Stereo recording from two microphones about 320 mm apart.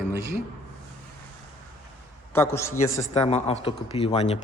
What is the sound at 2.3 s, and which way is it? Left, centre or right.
Speech, centre.